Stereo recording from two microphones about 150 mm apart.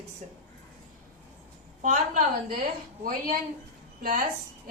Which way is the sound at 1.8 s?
60° right (ahead or behind).